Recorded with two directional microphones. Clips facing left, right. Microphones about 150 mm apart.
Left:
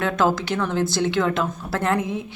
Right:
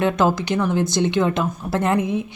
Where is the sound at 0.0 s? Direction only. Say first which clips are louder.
Right 2 dB; 15° right (ahead or behind).